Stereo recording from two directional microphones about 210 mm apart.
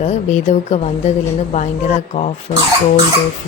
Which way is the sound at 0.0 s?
35° left (ahead or behind).